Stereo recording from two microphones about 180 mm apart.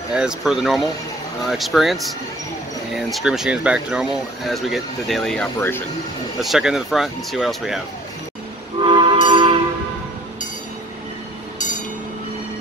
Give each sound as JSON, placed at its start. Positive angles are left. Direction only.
{"t": 0.1, "sound": "speech", "side_deg": -5}
{"t": 3.0, "sound": "speech", "side_deg": 0}
{"t": 6.4, "sound": "speech", "side_deg": 0}
{"t": 8.7, "sound": "train", "side_deg": -25}
{"t": 11.5, "sound": "train", "side_deg": 45}